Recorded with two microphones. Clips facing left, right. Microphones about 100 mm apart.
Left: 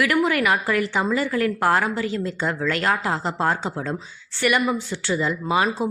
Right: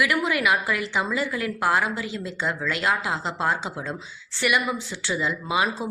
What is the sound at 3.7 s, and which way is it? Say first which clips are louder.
Speech: left 4 dB; 45° left (ahead or behind).